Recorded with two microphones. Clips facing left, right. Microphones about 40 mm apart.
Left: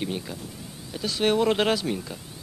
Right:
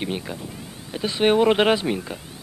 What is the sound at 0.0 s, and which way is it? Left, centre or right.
Speech, right.